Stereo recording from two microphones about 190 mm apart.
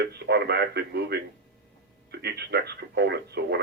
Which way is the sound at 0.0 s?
60° right (ahead or behind).